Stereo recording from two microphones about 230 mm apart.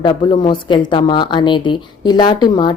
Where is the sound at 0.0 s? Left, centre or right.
Left.